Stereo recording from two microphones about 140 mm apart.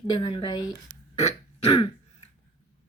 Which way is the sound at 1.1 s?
50° left (ahead or behind).